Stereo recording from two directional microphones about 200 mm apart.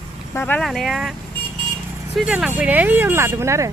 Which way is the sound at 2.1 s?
5° right (ahead or behind).